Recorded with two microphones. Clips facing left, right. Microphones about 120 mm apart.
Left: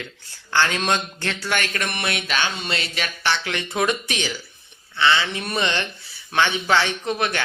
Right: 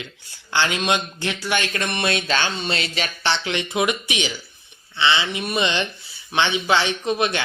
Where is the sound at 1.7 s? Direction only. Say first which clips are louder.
Right 3 dB; 25° right (ahead or behind).